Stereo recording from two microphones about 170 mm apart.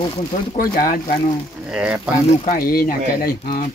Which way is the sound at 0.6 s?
55° left (ahead or behind).